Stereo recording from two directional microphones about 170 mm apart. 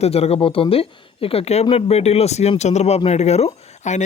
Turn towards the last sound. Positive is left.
turn(degrees=40)  # may be behind; listen again after turning